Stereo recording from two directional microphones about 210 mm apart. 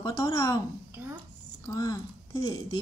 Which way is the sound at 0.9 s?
10° right (ahead or behind).